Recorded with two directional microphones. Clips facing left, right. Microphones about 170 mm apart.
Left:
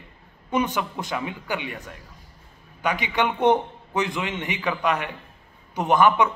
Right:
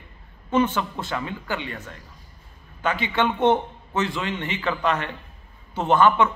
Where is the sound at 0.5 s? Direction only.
15° left (ahead or behind).